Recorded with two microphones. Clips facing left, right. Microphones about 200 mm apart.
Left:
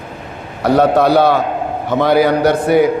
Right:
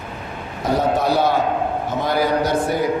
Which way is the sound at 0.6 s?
70° left (ahead or behind).